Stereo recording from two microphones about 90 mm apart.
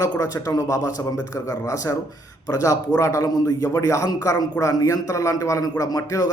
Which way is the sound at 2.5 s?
40° left (ahead or behind).